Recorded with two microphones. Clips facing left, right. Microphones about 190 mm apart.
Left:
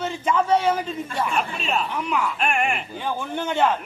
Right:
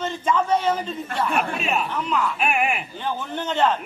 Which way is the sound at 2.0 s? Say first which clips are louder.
Right 1 dB; 10° left (ahead or behind).